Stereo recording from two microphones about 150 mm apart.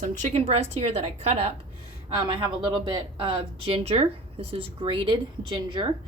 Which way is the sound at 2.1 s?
30° right (ahead or behind).